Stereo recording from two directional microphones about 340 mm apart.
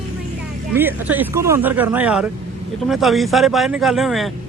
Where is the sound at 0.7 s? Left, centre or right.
Centre.